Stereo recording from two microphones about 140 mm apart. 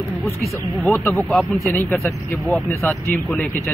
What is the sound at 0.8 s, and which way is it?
Speech, centre (ahead or behind).